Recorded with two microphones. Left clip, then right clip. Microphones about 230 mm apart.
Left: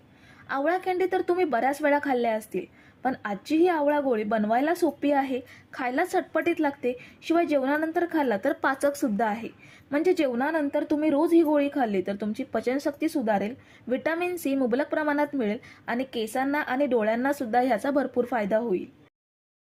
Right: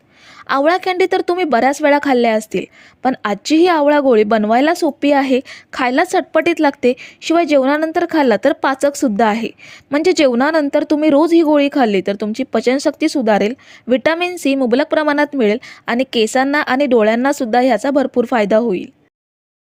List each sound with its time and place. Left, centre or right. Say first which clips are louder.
0.4 s a woman's voice: right 12 dB; right